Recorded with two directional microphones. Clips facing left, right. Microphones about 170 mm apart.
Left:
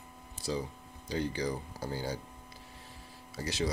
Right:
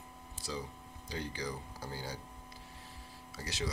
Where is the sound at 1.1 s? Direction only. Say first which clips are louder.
Left 7 dB; 25° left (ahead or behind).